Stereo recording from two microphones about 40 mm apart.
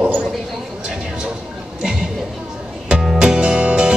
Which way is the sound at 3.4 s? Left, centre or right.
Right.